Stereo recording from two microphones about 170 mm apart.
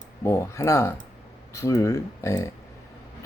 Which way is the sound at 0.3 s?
15° left (ahead or behind).